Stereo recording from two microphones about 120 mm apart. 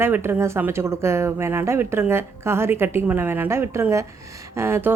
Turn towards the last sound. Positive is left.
turn(degrees=-20)  # may be behind; listen again after turning